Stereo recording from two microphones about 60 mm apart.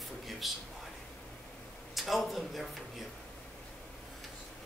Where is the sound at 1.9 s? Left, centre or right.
Centre.